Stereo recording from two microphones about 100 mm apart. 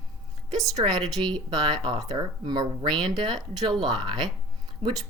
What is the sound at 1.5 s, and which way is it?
Speech, 45° right (ahead or behind).